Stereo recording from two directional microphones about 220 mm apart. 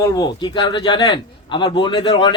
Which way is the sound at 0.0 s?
20° left (ahead or behind).